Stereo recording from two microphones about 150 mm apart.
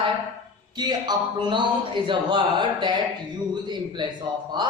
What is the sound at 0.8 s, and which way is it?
A man's voice, 30° right (ahead or behind).